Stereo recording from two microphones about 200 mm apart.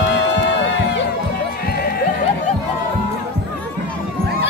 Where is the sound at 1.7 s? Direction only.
50° left (ahead or behind).